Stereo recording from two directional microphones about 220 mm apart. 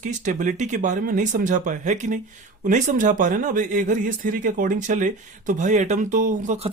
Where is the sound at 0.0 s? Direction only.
35° right (ahead or behind).